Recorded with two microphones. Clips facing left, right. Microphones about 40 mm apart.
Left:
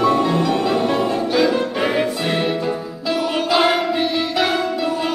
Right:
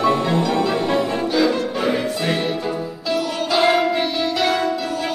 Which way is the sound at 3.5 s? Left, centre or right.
Centre.